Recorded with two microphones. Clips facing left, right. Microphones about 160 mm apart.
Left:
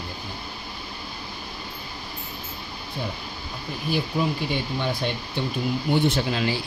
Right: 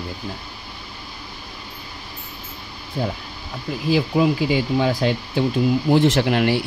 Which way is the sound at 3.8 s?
90° right.